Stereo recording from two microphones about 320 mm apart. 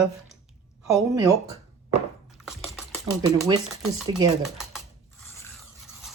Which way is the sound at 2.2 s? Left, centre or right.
Centre.